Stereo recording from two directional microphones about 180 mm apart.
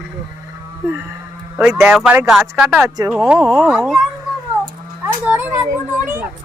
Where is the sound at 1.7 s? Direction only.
15° right (ahead or behind).